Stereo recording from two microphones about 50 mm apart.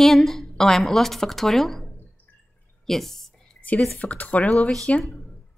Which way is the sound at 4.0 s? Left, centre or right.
Left.